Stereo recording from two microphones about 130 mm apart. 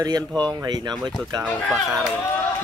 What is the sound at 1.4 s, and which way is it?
Speech, centre (ahead or behind).